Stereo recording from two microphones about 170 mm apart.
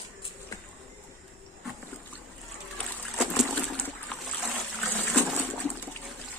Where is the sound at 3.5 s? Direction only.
10° left (ahead or behind).